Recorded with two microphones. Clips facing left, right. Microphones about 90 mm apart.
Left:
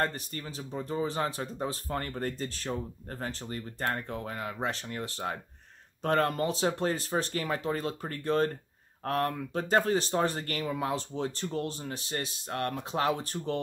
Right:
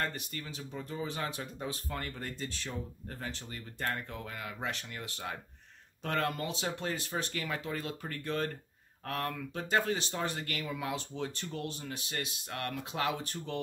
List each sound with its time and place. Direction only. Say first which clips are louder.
0.0 s speech: left 5 dB; 35° left (ahead or behind)